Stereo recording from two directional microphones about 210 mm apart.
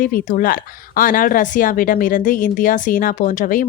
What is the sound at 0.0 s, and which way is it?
Speech, 40° left (ahead or behind).